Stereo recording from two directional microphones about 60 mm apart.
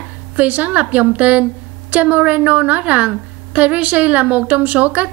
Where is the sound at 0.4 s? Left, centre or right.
Right.